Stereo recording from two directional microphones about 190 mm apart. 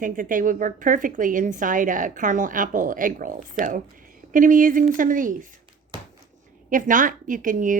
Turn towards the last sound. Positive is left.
turn(degrees=-45)  # may be behind; listen again after turning